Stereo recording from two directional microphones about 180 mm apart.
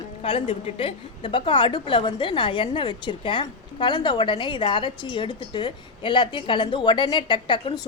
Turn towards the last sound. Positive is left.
turn(degrees=25)  # may be behind; listen again after turning